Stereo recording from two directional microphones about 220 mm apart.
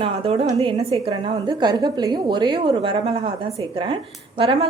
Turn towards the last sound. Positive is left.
turn(degrees=-25)  # may be behind; listen again after turning